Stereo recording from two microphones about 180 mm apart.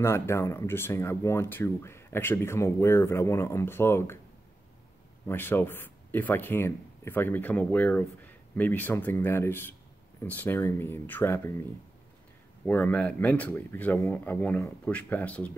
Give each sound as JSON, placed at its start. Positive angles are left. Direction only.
{"t": 0.0, "sound": "speech", "side_deg": 15}
{"t": 5.2, "sound": "speech", "side_deg": 10}
{"t": 12.6, "sound": "speech", "side_deg": 10}